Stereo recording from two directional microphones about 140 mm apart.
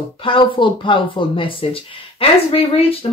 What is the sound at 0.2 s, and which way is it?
Speech, 35° left (ahead or behind).